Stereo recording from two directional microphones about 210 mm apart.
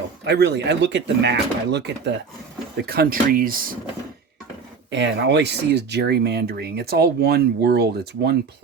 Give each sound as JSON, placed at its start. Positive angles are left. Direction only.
{"t": 0.3, "sound": "speech", "side_deg": -55}
{"t": 4.9, "sound": "speech", "side_deg": -55}